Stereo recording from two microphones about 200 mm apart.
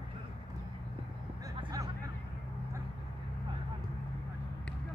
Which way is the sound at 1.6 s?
20° right (ahead or behind).